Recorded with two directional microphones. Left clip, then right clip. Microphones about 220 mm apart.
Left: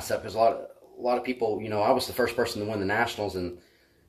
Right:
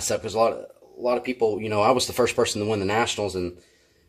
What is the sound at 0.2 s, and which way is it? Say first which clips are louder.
Speech: left 1 dB; 45° right (ahead or behind).